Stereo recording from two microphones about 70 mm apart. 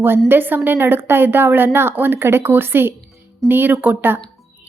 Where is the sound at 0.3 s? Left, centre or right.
Right.